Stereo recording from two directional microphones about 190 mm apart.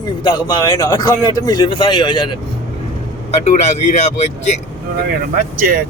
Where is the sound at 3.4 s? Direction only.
35° left (ahead or behind).